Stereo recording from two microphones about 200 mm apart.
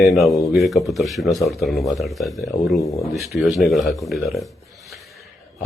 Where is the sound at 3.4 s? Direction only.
Centre (ahead or behind).